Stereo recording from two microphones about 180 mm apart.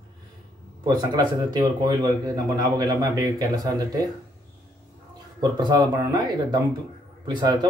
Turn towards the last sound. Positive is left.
turn(degrees=-25)  # may be behind; listen again after turning